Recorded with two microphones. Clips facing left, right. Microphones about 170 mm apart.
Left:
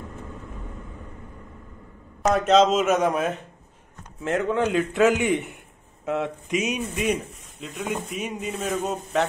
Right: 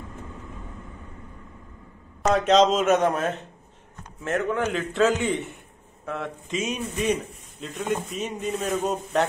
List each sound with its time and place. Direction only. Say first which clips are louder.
2.3 s a man's voice: even; 5° left (ahead or behind)